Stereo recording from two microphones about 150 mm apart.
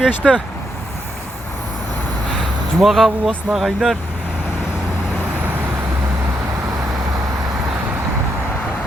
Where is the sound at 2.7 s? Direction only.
Centre (ahead or behind).